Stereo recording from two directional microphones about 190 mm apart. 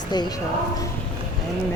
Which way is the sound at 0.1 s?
20° left (ahead or behind).